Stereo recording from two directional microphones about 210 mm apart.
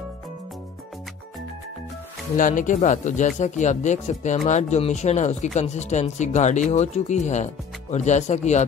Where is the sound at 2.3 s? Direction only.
40° left (ahead or behind).